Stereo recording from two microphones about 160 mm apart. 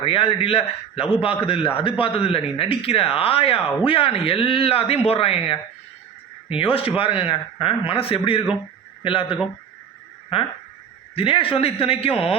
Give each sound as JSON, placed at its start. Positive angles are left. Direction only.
{"t": 0.0, "sound": "a man's voice", "side_deg": 35}